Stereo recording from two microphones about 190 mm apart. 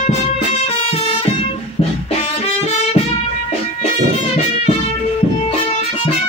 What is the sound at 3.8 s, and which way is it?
Music, 30° left (ahead or behind).